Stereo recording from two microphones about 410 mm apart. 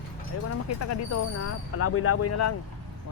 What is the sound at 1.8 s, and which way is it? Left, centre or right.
Speech, left.